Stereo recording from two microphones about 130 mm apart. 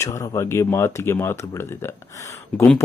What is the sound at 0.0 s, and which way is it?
Speech, 20° left (ahead or behind).